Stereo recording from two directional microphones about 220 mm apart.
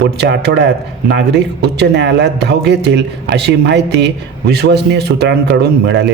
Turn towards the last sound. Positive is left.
turn(degrees=-50)  # may be behind; listen again after turning